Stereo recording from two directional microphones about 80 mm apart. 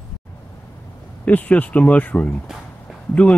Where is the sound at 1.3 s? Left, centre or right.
Centre.